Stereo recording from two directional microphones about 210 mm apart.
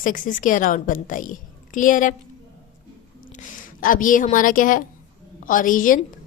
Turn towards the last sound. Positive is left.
turn(degrees=40)  # may be behind; listen again after turning